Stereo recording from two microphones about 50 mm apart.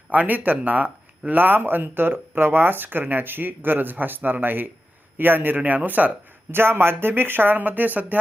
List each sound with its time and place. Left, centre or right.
0.1 s speech: right
6.5 s speech: right